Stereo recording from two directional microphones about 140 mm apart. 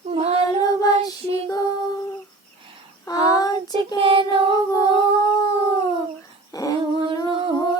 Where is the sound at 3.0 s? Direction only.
25° left (ahead or behind).